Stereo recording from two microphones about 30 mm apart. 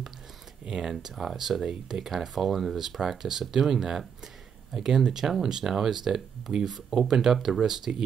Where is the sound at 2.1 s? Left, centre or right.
Centre.